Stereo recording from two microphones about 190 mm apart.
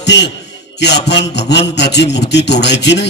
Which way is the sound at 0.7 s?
65° left (ahead or behind).